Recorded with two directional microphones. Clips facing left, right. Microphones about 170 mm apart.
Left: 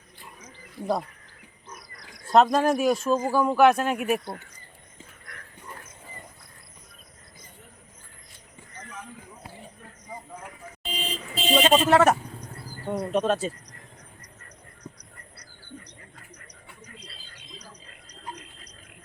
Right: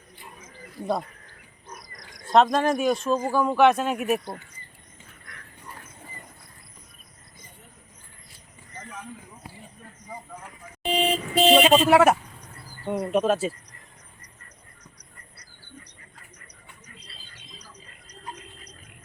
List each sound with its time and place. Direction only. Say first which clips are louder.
2.3 s a man's voice: even; 5° left (ahead or behind)
10.8 s vehicle: right 11 dB; 65° right (ahead or behind)
11.6 s a man's voice: right 2 dB; 10° right (ahead or behind)